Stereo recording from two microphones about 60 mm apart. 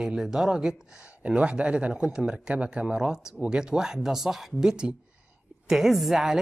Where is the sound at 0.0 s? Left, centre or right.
Centre.